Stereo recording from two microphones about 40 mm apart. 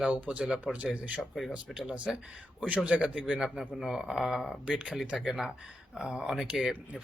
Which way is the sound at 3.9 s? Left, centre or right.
Centre.